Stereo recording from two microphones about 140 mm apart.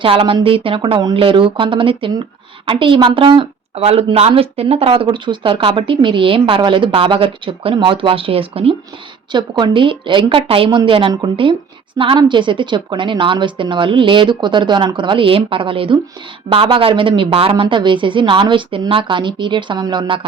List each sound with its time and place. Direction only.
0.0 s a woman's voice: 40° right (ahead or behind)